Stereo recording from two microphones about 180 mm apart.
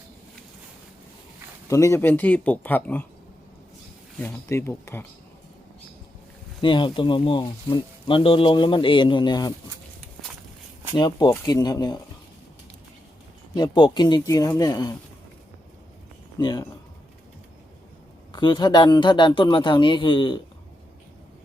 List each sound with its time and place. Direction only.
1.6 s speech: 15° left (ahead or behind)
4.2 s speech: 15° left (ahead or behind)
6.6 s speech: 25° left (ahead or behind)
10.9 s speech: 25° left (ahead or behind)
13.6 s speech: 25° left (ahead or behind)
16.4 s speech: 25° left (ahead or behind)
18.3 s speech: 25° left (ahead or behind)